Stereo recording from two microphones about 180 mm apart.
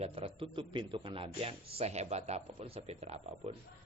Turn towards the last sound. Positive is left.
turn(degrees=-35)  # may be behind; listen again after turning